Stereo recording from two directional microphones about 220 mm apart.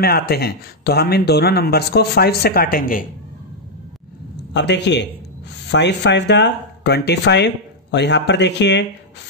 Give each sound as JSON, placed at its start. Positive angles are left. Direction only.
{"t": 0.0, "sound": "speech", "side_deg": 45}
{"t": 4.6, "sound": "speech", "side_deg": 50}